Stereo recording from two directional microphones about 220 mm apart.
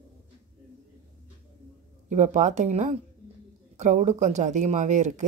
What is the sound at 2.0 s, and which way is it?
Speech, 35° right (ahead or behind).